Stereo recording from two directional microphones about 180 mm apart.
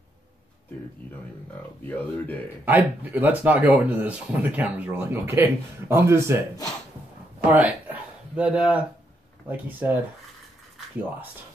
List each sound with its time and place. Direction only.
1.9 s speech: 10° left (ahead or behind)
2.6 s speech: 10° right (ahead or behind)
7.4 s a sound: 10° right (ahead or behind)
9.5 s speech: 10° right (ahead or behind)